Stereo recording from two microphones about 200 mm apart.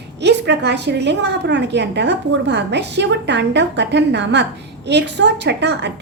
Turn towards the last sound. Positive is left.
turn(degrees=-60)  # may be behind; listen again after turning